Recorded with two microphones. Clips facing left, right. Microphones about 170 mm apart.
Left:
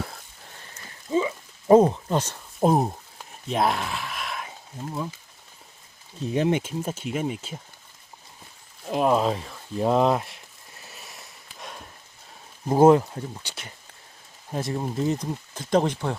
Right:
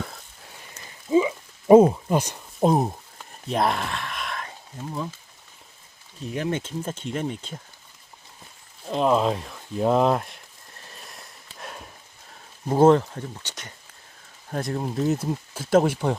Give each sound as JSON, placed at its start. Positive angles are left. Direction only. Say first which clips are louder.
{"t": 0.7, "sound": "a sound", "louder": "right 5 dB", "side_deg": -10}
{"t": 2.6, "sound": "a sound", "louder": "even", "side_deg": 0}
{"t": 6.3, "sound": "speech", "louder": "left 4 dB", "side_deg": 20}
{"t": 6.6, "sound": "speech", "louder": "left 1 dB", "side_deg": 10}
{"t": 8.9, "sound": "speech", "louder": "even", "side_deg": 5}
{"t": 10.8, "sound": "sniff", "louder": "right 1 dB", "side_deg": 5}
{"t": 12.6, "sound": "speech", "louder": "left 1 dB", "side_deg": 10}